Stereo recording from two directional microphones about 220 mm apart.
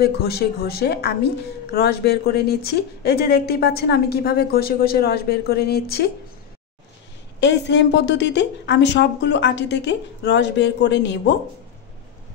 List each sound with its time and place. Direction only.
0.0 s speech: 45° left (ahead or behind)
7.3 s speech: 55° left (ahead or behind)